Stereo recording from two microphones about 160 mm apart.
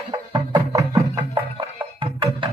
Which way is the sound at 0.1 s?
25° right (ahead or behind).